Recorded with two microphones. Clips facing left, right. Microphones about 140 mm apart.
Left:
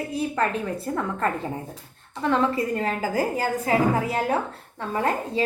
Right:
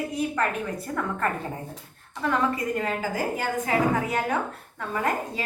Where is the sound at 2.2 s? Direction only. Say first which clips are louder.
Left 3 dB; 30° left (ahead or behind).